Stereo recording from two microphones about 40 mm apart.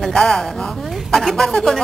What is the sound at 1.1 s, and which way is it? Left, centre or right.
Speech, centre.